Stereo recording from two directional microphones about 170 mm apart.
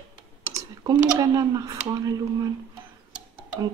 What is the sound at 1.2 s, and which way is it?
Speech, 20° right (ahead or behind).